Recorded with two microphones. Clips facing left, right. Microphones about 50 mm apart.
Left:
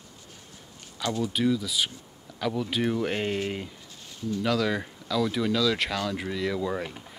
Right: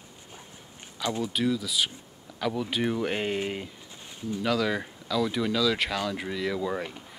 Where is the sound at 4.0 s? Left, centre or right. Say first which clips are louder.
Left 2 dB; right.